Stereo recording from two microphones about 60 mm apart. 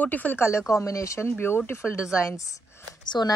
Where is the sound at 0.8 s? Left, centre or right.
Left.